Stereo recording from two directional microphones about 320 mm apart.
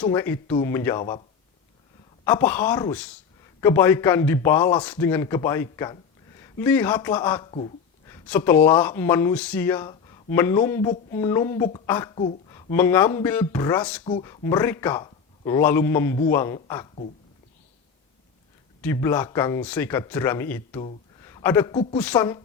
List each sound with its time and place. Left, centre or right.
0.0 s speech: centre
2.2 s speech: centre
18.8 s speech: centre